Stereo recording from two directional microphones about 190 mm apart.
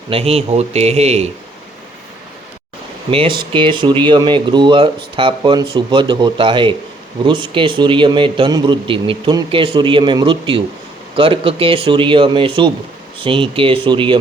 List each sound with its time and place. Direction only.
0.1 s speech: 30° right (ahead or behind)
3.1 s a man's voice: 30° right (ahead or behind)